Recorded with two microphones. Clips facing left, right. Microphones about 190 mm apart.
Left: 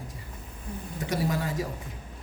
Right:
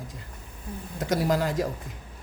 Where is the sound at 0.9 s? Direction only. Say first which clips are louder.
Right 4 dB; 85° right.